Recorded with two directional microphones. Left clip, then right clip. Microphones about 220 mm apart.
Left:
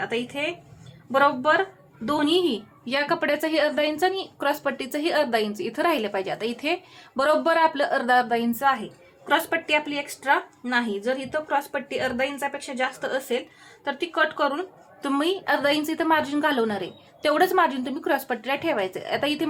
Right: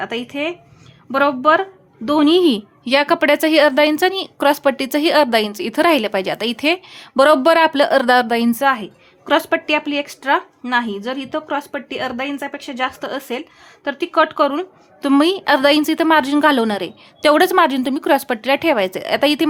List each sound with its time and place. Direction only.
0.0 s a woman's voice: 55° right (ahead or behind)